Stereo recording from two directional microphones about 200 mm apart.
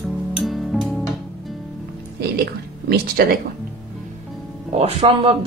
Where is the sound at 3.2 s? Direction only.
50° right (ahead or behind).